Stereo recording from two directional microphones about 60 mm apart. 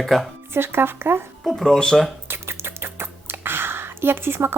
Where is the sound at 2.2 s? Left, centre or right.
Right.